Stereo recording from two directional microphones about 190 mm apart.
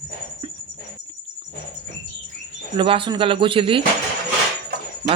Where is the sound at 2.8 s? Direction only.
25° right (ahead or behind).